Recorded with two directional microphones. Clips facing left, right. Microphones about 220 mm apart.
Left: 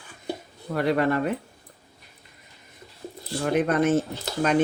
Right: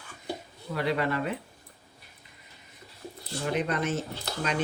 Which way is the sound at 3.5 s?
50° left (ahead or behind).